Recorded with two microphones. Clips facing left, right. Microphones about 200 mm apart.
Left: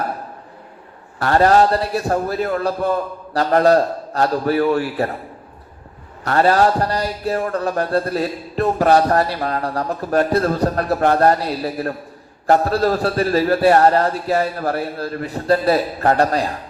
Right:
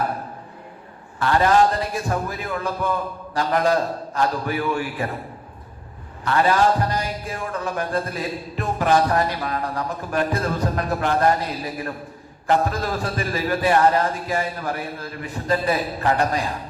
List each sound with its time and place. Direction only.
1.2 s music: 45° left (ahead or behind)
6.2 s music: 40° left (ahead or behind)